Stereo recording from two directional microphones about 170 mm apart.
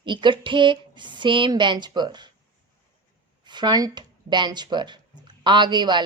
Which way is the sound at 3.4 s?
25° right (ahead or behind).